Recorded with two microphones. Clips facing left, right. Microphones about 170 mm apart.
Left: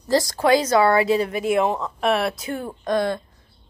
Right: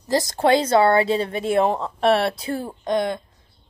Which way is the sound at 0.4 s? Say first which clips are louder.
Right 2 dB; 30° right (ahead or behind).